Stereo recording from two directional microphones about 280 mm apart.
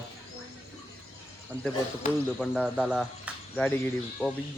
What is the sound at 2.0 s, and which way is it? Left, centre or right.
Speech, left.